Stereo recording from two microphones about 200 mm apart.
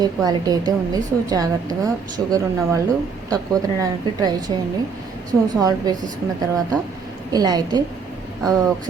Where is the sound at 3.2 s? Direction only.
15° right (ahead or behind).